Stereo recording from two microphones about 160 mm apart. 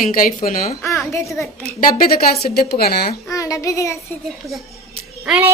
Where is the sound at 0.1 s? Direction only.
60° left (ahead or behind).